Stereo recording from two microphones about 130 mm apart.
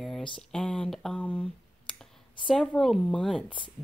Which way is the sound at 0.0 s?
5° left (ahead or behind).